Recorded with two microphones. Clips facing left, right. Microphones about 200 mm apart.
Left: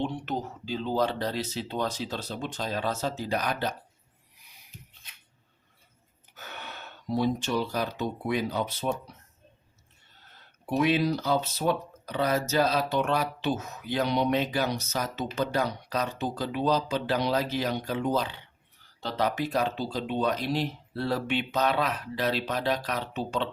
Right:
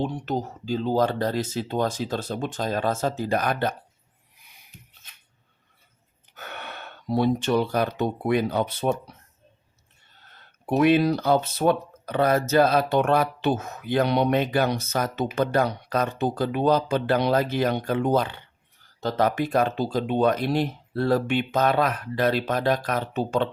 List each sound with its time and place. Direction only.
0.0 s speech: 40° right (ahead or behind)
6.3 s speech: 60° right (ahead or behind)
10.7 s speech: 55° right (ahead or behind)